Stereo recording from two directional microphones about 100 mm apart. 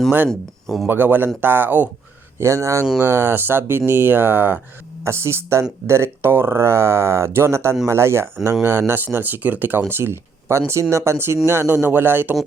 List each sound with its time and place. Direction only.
0.3 s speech: 5° left (ahead or behind)
0.9 s speech: 20° right (ahead or behind)
2.4 s speech: 30° right (ahead or behind)